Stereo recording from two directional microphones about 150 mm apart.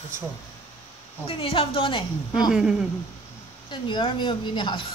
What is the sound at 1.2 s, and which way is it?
Speech, 40° left (ahead or behind).